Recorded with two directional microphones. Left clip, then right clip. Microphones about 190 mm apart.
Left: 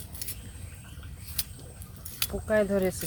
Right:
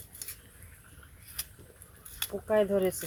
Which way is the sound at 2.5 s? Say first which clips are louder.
Left 1 dB; 30° right (ahead or behind).